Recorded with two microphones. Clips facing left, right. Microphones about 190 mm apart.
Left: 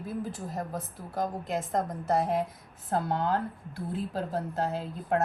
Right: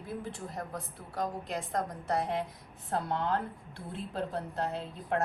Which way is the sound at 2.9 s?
40° left (ahead or behind).